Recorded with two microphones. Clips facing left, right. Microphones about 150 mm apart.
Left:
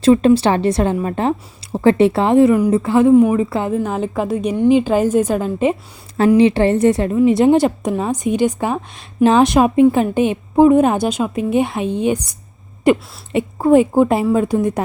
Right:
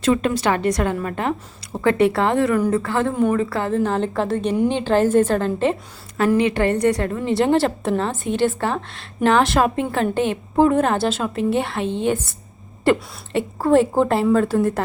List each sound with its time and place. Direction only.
0.0 s a woman's voice: 30° left (ahead or behind)
3.8 s a woman's voice: 5° left (ahead or behind)
6.1 s a woman's voice: 25° left (ahead or behind)